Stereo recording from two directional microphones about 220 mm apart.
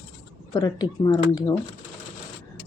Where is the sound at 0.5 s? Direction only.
15° left (ahead or behind).